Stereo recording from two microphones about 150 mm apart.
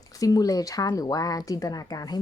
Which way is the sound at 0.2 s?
25° left (ahead or behind).